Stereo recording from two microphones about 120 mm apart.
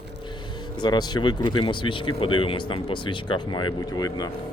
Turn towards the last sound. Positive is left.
turn(degrees=35)  # may be behind; listen again after turning